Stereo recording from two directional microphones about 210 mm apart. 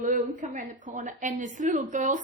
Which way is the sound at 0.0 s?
35° right (ahead or behind).